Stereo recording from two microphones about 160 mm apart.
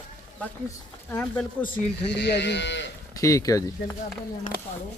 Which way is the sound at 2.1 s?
90° left.